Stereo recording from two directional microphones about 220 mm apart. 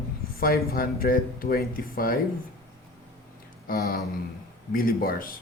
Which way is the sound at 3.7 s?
40° left (ahead or behind).